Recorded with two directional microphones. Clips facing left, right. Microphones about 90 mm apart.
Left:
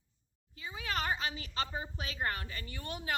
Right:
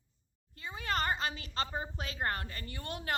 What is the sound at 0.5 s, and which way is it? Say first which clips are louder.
A woman's voice: right 2 dB; 50° right (ahead or behind).